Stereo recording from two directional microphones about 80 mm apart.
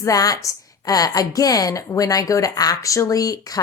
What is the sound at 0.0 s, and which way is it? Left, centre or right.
A woman's voice, left.